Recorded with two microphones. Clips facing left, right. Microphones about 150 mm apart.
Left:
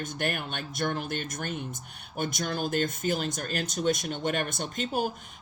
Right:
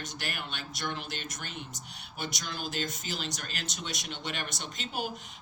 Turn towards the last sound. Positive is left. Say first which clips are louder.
# left 7 dB
turn(degrees=45)  # may be behind; listen again after turning